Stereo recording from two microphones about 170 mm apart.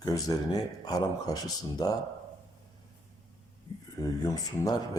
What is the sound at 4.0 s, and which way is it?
Speech, 20° left (ahead or behind).